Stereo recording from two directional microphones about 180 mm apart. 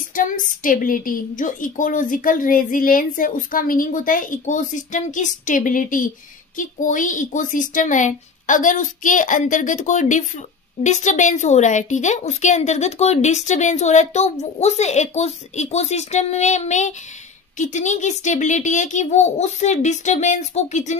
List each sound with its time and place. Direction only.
0.1 s a woman's voice: 50° left (ahead or behind)